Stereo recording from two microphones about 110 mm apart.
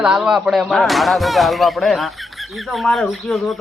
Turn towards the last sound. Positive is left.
turn(degrees=0)  # may be behind; listen again after turning